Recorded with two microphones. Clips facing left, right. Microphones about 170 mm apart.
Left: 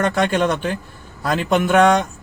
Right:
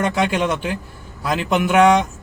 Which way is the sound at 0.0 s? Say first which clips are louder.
Left 1 dB; 10° right (ahead or behind).